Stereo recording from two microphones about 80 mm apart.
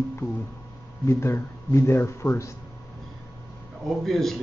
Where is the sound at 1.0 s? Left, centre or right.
Left.